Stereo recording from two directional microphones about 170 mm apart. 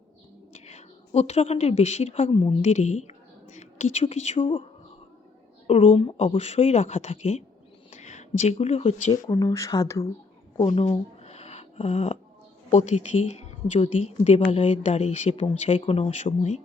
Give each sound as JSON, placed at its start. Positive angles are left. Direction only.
{"t": 0.5, "sound": "a woman's voice", "side_deg": 40}
{"t": 5.6, "sound": "speech", "side_deg": 35}
{"t": 9.2, "sound": "speech", "side_deg": 20}
{"t": 10.8, "sound": "a sound", "side_deg": 35}
{"t": 12.7, "sound": "speech", "side_deg": 45}